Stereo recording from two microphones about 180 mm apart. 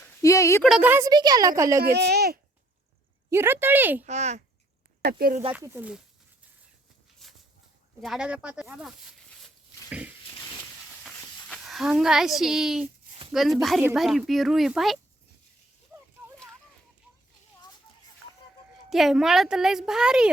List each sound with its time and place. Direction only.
0.2 s speech: 15° left (ahead or behind)
0.6 s a woman's voice: 5° right (ahead or behind)
1.8 s a child's voice: 65° right (ahead or behind)
3.2 s speech: 15° right (ahead or behind)
4.0 s a child's voice: 40° right (ahead or behind)
5.0 s speech: 55° right (ahead or behind)
5.5 s speech: 10° right (ahead or behind)
7.2 s a sound: centre (ahead or behind)
8.0 s a woman's voice: 5° right (ahead or behind)
11.0 s a sound: centre (ahead or behind)
13.3 s a woman's voice: centre (ahead or behind)
18.9 s a woman's voice: centre (ahead or behind)